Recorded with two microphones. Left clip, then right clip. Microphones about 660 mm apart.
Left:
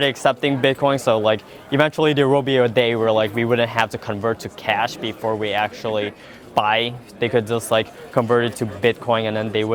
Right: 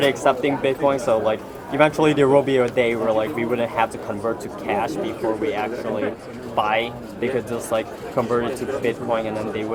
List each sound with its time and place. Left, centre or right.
0.0 s a man's voice: left